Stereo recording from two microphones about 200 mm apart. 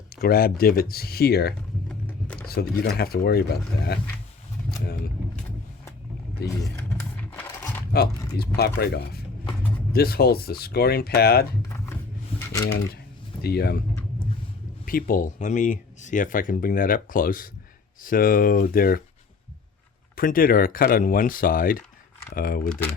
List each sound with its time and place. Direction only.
0.2 s speech: 50° left (ahead or behind)
1.9 s a sound: 5° left (ahead or behind)
2.5 s speech: 50° left (ahead or behind)
6.4 s speech: 55° left (ahead or behind)
6.7 s a sound: 5° left (ahead or behind)
7.9 s speech: 55° left (ahead or behind)
13.4 s speech: 50° left (ahead or behind)
14.8 s speech: 45° left (ahead or behind)
20.1 s speech: 45° left (ahead or behind)